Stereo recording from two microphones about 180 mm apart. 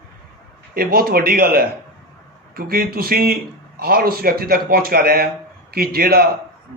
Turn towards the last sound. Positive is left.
turn(degrees=-60)  # may be behind; listen again after turning